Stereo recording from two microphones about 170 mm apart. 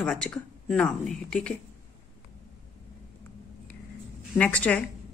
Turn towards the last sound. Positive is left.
turn(degrees=10)  # may be behind; listen again after turning